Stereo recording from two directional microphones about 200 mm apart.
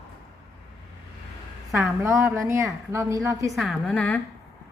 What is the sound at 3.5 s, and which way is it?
Speech, centre (ahead or behind).